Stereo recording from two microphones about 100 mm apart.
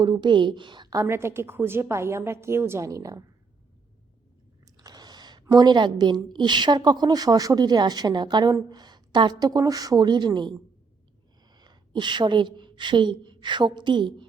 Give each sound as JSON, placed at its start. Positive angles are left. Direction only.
{"t": 0.0, "sound": "a woman's voice", "side_deg": -50}
{"t": 0.9, "sound": "a woman's voice", "side_deg": -25}
{"t": 4.6, "sound": "a sound", "side_deg": -40}
{"t": 6.1, "sound": "a woman's voice", "side_deg": -45}